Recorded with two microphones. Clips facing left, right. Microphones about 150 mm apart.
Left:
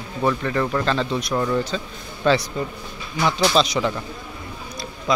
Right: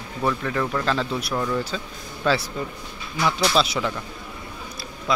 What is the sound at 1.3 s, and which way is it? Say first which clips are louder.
Speech: left 4 dB; 5° left (ahead or behind).